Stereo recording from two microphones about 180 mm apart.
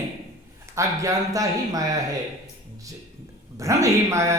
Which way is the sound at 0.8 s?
20° right (ahead or behind).